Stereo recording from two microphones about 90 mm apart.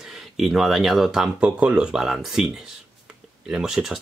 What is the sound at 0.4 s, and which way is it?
Speech, centre (ahead or behind).